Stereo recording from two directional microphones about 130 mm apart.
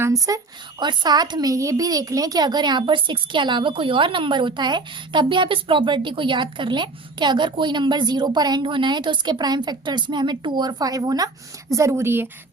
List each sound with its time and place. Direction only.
0.0 s speech: 25° right (ahead or behind)